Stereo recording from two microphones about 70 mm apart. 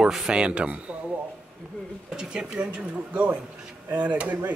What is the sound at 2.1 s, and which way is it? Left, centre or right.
Speech, centre.